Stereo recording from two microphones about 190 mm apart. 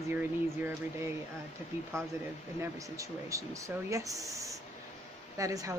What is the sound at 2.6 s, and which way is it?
Speech, 15° right (ahead or behind).